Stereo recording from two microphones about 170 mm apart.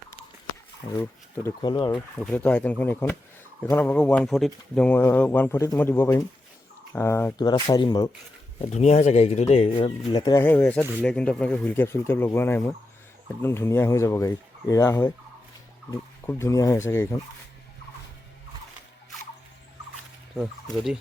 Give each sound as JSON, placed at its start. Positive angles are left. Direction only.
{"t": 0.9, "sound": "speech", "side_deg": 35}
{"t": 2.1, "sound": "speech", "side_deg": 5}
{"t": 8.6, "sound": "speech", "side_deg": 40}
{"t": 10.4, "sound": "speech", "side_deg": 10}
{"t": 15.9, "sound": "turkey", "side_deg": 15}
{"t": 20.3, "sound": "speech", "side_deg": 0}